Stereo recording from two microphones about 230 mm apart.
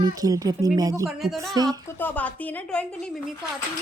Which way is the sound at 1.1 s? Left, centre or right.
Centre.